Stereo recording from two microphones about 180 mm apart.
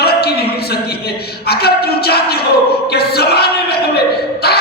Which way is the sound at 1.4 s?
60° left (ahead or behind).